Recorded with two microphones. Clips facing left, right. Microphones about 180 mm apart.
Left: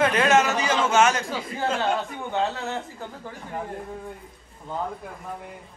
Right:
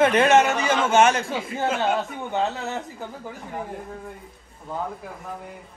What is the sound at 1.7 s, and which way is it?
A man's voice, 5° right (ahead or behind).